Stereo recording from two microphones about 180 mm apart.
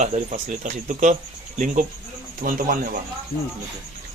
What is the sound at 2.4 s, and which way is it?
Speech, 55° right (ahead or behind).